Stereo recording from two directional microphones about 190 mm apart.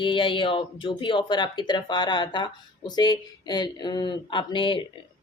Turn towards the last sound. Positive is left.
turn(degrees=25)  # may be behind; listen again after turning